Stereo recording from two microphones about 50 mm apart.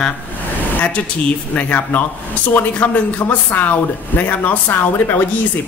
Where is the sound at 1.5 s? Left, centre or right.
Left.